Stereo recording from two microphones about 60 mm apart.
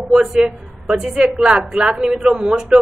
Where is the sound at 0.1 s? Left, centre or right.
Centre.